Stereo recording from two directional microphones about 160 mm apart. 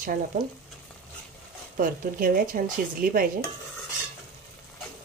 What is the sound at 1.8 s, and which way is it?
Speech, 60° right (ahead or behind).